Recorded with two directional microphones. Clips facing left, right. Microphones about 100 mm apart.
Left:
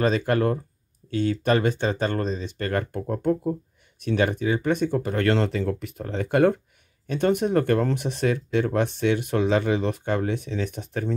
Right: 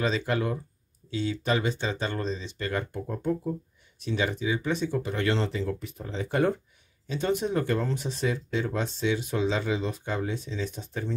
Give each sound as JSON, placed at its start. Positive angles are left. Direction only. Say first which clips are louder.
{"t": 0.0, "sound": "speech", "louder": "left 6 dB", "side_deg": 50}